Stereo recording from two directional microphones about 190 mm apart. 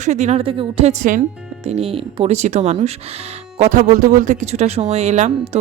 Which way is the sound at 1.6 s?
30° right (ahead or behind).